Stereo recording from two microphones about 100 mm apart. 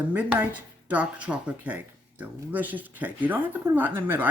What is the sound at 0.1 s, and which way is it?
Speech, 15° right (ahead or behind).